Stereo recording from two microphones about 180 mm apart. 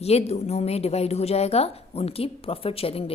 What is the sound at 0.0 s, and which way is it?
A woman's voice, 35° left (ahead or behind).